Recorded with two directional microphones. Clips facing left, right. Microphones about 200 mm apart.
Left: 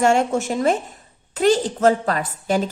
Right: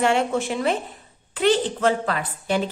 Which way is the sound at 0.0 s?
45° left (ahead or behind).